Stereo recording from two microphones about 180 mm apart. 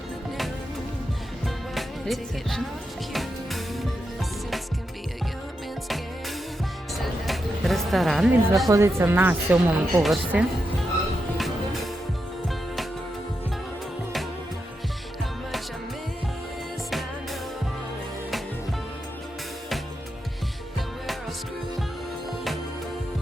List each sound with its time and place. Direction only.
1.5 s music: centre (ahead or behind)
7.0 s music: centre (ahead or behind)
8.7 s speech: 15° right (ahead or behind)
10.0 s a woman's voice: centre (ahead or behind)